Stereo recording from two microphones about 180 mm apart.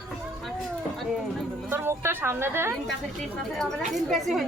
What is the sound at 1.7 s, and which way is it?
A woman's voice, 15° right (ahead or behind).